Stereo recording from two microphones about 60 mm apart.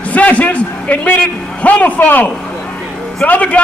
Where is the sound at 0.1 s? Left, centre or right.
Left.